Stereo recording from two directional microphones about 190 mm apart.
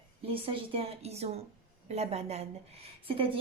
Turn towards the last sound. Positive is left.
turn(degrees=-30)  # may be behind; listen again after turning